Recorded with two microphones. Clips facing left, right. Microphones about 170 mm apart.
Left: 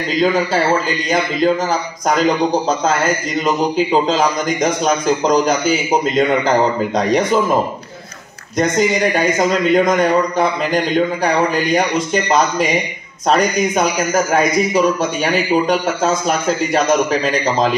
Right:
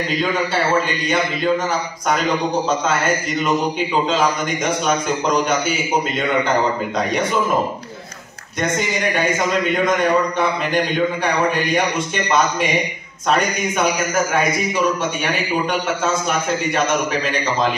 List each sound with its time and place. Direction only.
0.8 s a man's voice: 35° left (ahead or behind)
3.4 s a man's voice: 35° left (ahead or behind)
8.5 s a man's voice: 35° left (ahead or behind)